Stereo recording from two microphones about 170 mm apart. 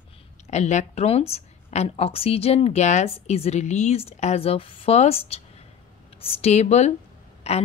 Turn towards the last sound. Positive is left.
turn(degrees=40)  # may be behind; listen again after turning